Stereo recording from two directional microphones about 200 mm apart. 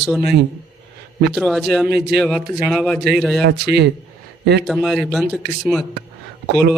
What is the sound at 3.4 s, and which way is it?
Speech, 55° right (ahead or behind).